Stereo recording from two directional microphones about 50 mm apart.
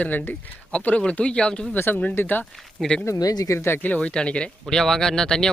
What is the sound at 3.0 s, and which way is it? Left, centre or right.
Speech, left.